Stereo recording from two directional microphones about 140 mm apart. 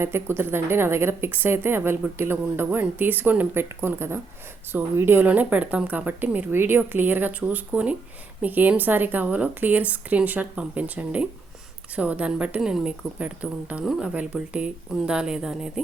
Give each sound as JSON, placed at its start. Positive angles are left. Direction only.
{"t": 0.0, "sound": "a woman's voice", "side_deg": -15}